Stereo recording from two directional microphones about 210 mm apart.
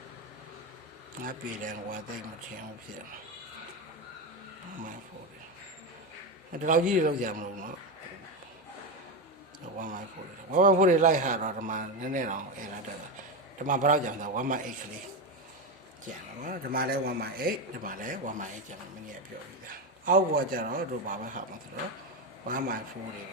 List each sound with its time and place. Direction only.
1.2 s speech: 40° right (ahead or behind)
6.6 s speech: 40° right (ahead or behind)
9.7 s speech: 40° right (ahead or behind)
13.7 s speech: 40° right (ahead or behind)
16.0 s speech: 40° right (ahead or behind)
20.1 s speech: 40° right (ahead or behind)
22.4 s speech: 40° right (ahead or behind)